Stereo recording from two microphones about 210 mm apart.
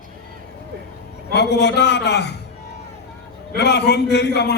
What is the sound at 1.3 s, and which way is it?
A man's voice, 55° left (ahead or behind).